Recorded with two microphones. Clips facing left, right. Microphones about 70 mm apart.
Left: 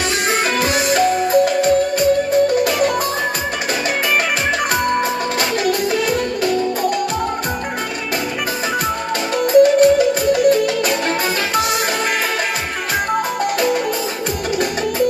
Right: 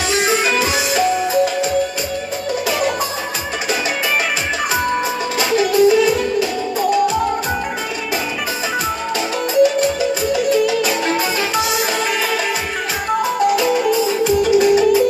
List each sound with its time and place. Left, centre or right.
0.1 s music: left
5.5 s music: left
9.5 s music: left
13.4 s music: left